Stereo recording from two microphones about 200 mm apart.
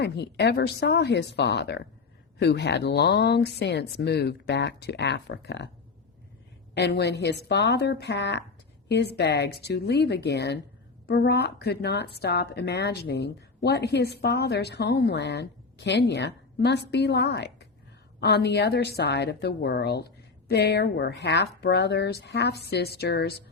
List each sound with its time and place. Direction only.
0.0 s a woman's voice: 55° left (ahead or behind)
6.7 s a woman's voice: 55° left (ahead or behind)